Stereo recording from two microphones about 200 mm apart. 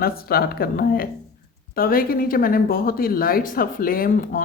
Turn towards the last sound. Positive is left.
turn(degrees=45)  # may be behind; listen again after turning